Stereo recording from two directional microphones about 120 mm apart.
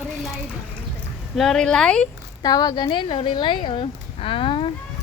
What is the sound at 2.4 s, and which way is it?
Speech, 35° left (ahead or behind).